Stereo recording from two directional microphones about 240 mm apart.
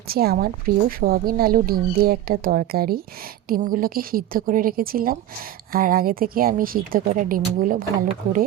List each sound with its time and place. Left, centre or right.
0.1 s speech: right